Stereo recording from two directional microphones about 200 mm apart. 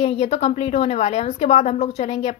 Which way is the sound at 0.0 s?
35° left (ahead or behind).